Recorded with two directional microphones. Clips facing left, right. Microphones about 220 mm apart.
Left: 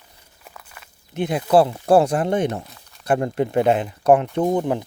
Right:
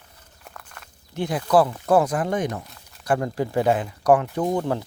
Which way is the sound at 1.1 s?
20° left (ahead or behind).